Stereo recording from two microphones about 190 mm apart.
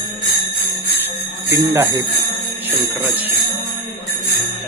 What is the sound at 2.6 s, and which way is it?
Jingle bell, 10° right (ahead or behind).